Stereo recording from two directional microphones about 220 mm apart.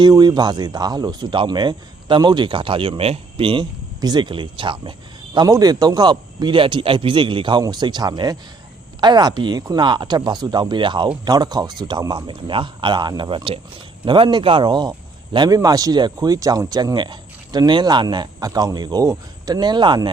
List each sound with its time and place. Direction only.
0.0 s speech: 20° right (ahead or behind)